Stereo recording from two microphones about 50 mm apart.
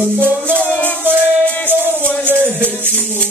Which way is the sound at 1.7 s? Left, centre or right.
Right.